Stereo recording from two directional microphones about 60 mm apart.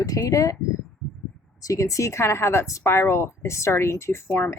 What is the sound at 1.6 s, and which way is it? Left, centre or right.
A woman's voice, left.